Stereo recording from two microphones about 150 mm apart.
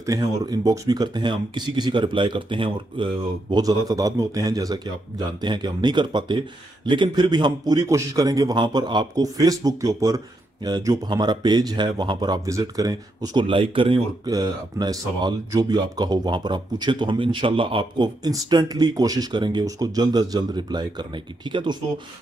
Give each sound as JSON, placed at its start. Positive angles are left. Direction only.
{"t": 0.0, "sound": "a man's voice", "side_deg": -25}
{"t": 14.3, "sound": "a man's voice", "side_deg": -25}